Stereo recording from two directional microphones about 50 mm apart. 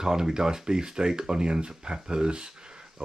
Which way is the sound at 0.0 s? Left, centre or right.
Centre.